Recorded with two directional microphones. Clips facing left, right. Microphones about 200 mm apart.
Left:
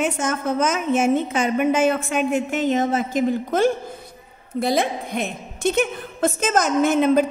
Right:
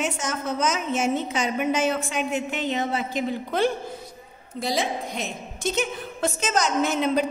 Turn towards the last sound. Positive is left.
turn(degrees=50)  # may be behind; listen again after turning